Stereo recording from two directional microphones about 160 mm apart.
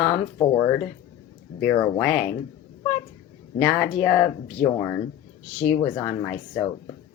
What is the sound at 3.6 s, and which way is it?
Speech, 10° left (ahead or behind).